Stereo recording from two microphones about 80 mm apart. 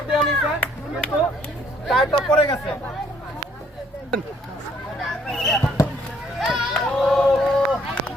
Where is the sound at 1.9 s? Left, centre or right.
Centre.